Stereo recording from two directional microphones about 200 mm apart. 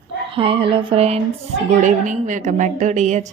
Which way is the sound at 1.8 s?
40° right (ahead or behind).